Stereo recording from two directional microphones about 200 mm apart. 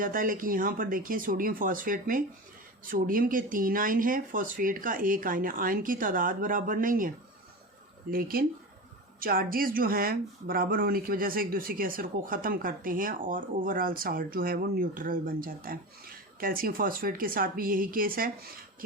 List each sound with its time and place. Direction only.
0.0 s speech: 45° right (ahead or behind)
8.1 s speech: 45° right (ahead or behind)